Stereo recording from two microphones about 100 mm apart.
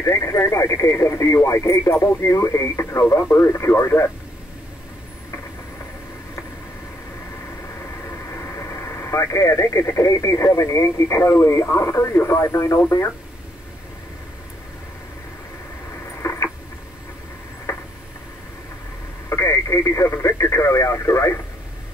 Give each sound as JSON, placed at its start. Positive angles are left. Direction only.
{"t": 0.0, "sound": "speech", "side_deg": 30}
{"t": 8.3, "sound": "speech", "side_deg": 25}
{"t": 16.2, "sound": "patter", "side_deg": 30}
{"t": 17.7, "sound": "a sound", "side_deg": 25}
{"t": 19.2, "sound": "speech", "side_deg": 30}